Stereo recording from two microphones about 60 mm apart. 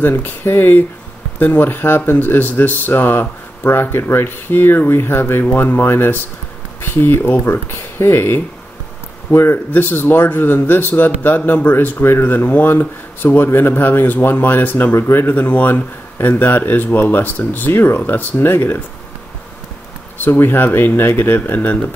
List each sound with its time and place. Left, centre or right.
0.0 s speech: left
20.2 s speech: left